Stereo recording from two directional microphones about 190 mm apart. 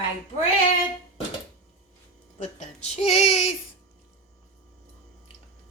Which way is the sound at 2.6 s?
35° left (ahead or behind).